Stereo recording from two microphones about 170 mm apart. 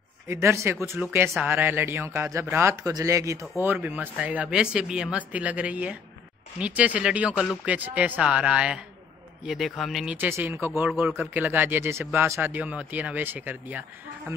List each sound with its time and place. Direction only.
0.3 s a man's voice: 15° right (ahead or behind); by 10.1 s centre (ahead or behind)
10.1 s a man's voice: 10° right (ahead or behind)